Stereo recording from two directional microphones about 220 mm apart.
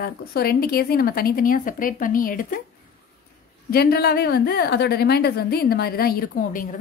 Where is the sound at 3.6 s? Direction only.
45° left (ahead or behind).